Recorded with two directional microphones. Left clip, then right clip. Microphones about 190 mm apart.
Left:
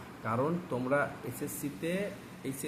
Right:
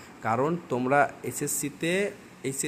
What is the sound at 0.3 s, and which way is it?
Speech, 55° right (ahead or behind).